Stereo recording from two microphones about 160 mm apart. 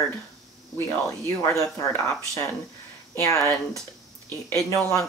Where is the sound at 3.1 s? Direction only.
20° left (ahead or behind).